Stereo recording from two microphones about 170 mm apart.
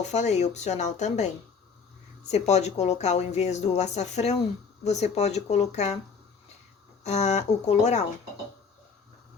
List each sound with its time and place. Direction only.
0.1 s speech: 40° left (ahead or behind)
2.3 s speech: 40° left (ahead or behind)
7.0 s speech: 40° left (ahead or behind)